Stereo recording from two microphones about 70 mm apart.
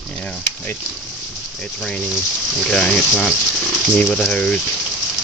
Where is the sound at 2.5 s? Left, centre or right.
Centre.